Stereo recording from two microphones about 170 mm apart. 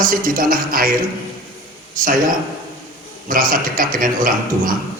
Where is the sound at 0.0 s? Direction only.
55° right (ahead or behind).